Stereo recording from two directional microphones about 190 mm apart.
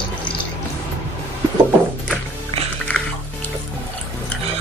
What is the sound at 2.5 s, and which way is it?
Music, 30° right (ahead or behind).